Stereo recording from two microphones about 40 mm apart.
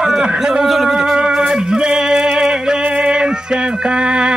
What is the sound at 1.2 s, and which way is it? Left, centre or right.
Music, right.